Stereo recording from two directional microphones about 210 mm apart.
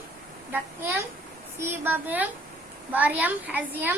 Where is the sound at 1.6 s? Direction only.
10° right (ahead or behind).